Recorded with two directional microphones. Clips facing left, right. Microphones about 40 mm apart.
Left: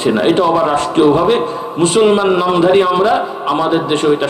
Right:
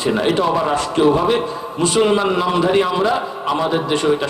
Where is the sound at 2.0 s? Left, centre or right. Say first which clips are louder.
Left 5 dB; left.